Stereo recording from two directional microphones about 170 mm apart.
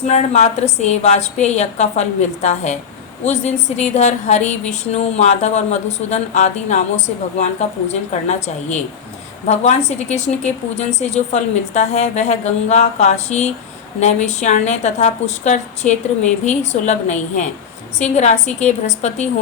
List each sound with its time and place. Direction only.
0.1 s a woman's voice: 40° left (ahead or behind)